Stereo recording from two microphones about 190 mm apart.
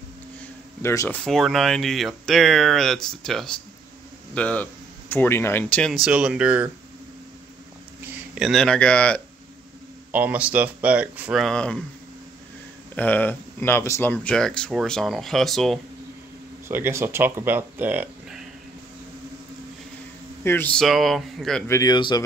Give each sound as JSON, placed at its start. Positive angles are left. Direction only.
{"t": 0.4, "sound": "a man's voice", "side_deg": 10}
{"t": 8.4, "sound": "speech", "side_deg": 0}
{"t": 10.1, "sound": "speech", "side_deg": -10}
{"t": 12.9, "sound": "speech", "side_deg": 10}
{"t": 16.6, "sound": "speech", "side_deg": -10}
{"t": 20.4, "sound": "speech", "side_deg": 10}
{"t": 21.6, "sound": "speech", "side_deg": 20}